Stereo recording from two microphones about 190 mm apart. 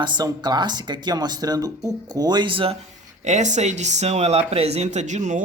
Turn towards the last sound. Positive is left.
turn(degrees=-40)  # may be behind; listen again after turning